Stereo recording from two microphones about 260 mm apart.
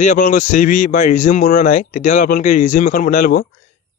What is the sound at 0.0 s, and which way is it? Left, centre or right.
A man's voice, left.